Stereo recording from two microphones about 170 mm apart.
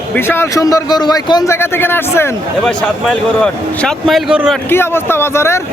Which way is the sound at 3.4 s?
Centre (ahead or behind).